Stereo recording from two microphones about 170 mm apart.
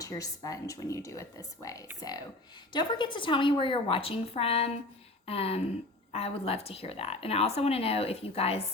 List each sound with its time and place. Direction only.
0.0 s speech: 20° left (ahead or behind)
5.2 s a sound: 35° left (ahead or behind)
6.1 s speech: 35° left (ahead or behind)